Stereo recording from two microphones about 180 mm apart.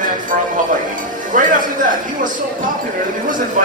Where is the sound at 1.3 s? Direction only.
45° right (ahead or behind).